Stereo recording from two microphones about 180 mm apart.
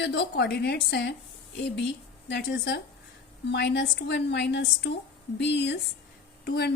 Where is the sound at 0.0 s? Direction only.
70° left (ahead or behind).